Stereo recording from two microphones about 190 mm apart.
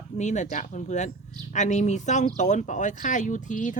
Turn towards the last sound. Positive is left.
turn(degrees=40)  # may be behind; listen again after turning